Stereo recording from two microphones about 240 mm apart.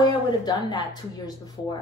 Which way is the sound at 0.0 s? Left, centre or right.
Centre.